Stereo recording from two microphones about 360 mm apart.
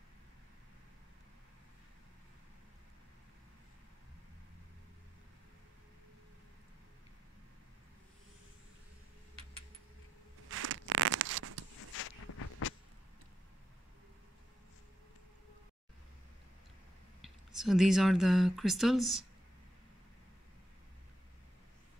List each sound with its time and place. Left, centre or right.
10.5 s a sound: right
12.0 s walk: left
17.6 s speech: centre